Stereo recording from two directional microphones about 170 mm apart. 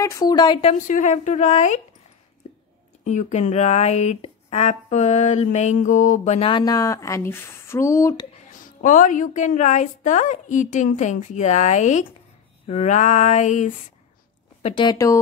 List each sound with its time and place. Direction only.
0.0 s a woman's voice: 20° left (ahead or behind); by 1.8 s 45° left (ahead or behind)
3.0 s a woman's voice: 45° left (ahead or behind)
6.5 s speech: 25° left (ahead or behind)
8.5 s a woman's voice: 50° left (ahead or behind)
14.9 s speech: 20° left (ahead or behind)